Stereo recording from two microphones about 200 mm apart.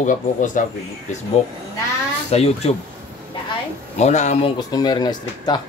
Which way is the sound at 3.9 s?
35° left (ahead or behind).